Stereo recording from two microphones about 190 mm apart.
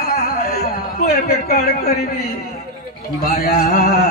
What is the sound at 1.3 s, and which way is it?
Speech, 55° left (ahead or behind).